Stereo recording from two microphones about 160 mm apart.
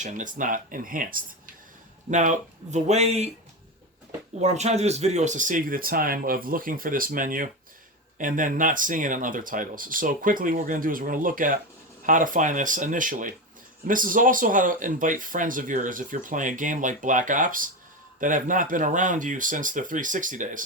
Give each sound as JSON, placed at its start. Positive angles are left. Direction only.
{"t": 0.0, "sound": "speech", "side_deg": -50}
{"t": 2.0, "sound": "speech", "side_deg": -50}
{"t": 4.4, "sound": "speech", "side_deg": -45}